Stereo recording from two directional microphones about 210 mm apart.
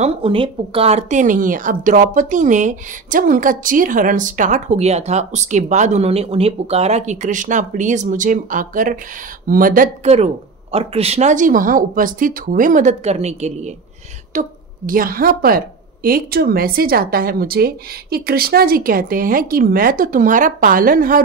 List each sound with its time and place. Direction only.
0.0 s speech: 25° right (ahead or behind); by 21.2 s 40° right (ahead or behind)